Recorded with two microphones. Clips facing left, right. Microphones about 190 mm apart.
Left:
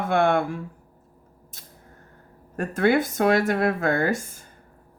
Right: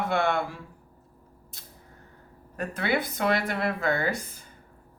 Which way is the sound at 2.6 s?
45° left (ahead or behind).